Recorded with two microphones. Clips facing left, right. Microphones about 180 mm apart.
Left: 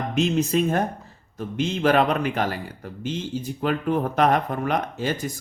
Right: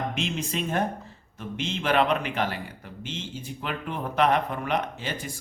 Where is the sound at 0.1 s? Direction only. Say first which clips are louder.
Left 9 dB; 45° left (ahead or behind).